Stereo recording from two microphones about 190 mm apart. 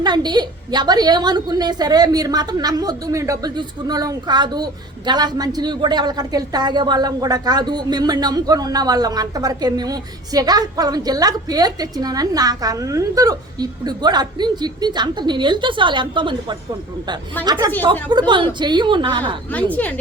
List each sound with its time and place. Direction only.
0.0 s a woman's voice: 20° right (ahead or behind)
19.7 s a woman's voice: 10° left (ahead or behind)